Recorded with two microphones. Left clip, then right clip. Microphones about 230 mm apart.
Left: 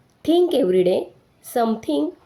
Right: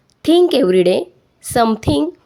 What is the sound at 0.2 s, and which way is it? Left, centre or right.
A woman's voice, right.